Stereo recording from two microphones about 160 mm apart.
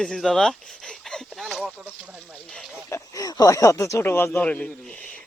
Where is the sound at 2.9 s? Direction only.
20° left (ahead or behind).